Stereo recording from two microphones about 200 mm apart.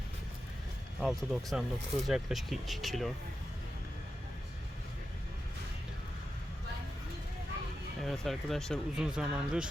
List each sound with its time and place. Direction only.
1.0 s speech: centre (ahead or behind)
8.0 s speech: centre (ahead or behind)